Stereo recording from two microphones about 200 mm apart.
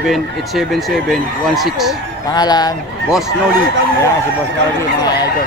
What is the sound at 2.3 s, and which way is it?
Speech, 20° left (ahead or behind).